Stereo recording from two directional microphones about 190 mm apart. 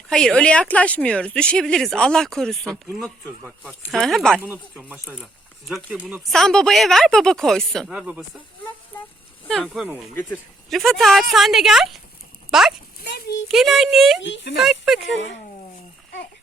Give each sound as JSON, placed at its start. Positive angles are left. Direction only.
{"t": 0.1, "sound": "speech", "side_deg": 5}
{"t": 4.4, "sound": "speech", "side_deg": -10}
{"t": 9.5, "sound": "speech", "side_deg": 0}
{"t": 13.0, "sound": "a sound", "side_deg": 55}
{"t": 13.5, "sound": "speech", "side_deg": 0}
{"t": 14.2, "sound": "speech", "side_deg": 75}
{"t": 14.5, "sound": "speech", "side_deg": 0}
{"t": 15.1, "sound": "speech", "side_deg": 75}